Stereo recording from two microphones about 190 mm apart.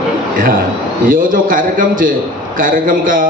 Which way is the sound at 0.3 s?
45° right (ahead or behind).